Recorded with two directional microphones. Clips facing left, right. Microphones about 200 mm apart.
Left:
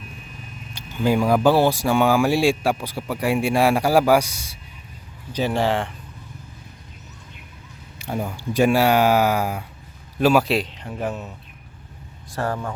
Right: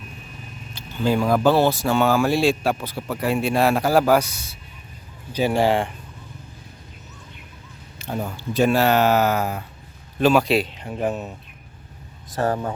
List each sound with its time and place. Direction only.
1.0 s speech: 15° left (ahead or behind)
5.3 s speech: 10° right (ahead or behind)
7.9 s a man's voice: 15° left (ahead or behind); by 10.8 s 5° right (ahead or behind)
11.0 s speech: 20° right (ahead or behind)